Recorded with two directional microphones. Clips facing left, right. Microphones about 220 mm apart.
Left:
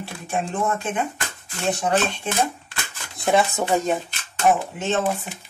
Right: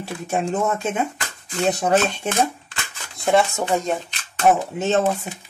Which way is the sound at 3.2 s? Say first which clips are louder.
Right 1 dB; centre (ahead or behind).